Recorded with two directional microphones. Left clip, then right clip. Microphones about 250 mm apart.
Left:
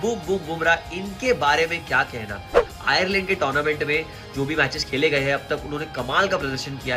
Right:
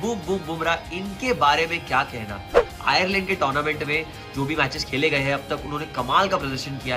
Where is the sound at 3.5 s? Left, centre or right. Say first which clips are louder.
Left 2 dB; centre.